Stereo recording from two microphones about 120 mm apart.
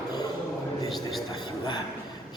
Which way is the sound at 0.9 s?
Centre (ahead or behind).